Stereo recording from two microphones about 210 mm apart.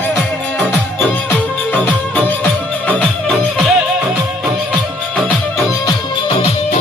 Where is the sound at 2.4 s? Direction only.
5° left (ahead or behind).